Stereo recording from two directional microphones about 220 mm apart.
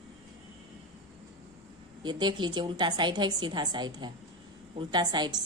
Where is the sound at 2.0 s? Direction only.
20° right (ahead or behind).